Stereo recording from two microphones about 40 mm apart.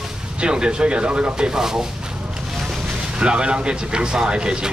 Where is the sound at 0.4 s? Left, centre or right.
Right.